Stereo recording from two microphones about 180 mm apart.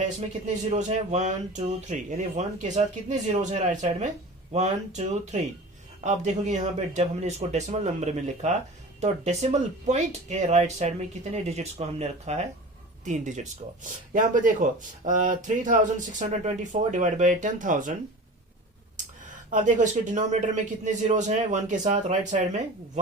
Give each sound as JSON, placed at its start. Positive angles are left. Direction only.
{"t": 0.2, "sound": "speech", "side_deg": -40}
{"t": 19.2, "sound": "speech", "side_deg": -45}